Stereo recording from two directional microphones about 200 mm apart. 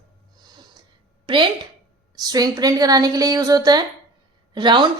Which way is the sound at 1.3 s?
25° right (ahead or behind).